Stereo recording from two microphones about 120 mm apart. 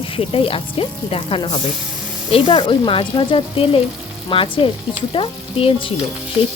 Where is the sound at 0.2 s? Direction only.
50° left (ahead or behind).